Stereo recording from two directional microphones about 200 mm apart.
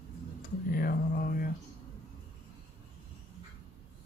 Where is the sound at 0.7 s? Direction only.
45° left (ahead or behind).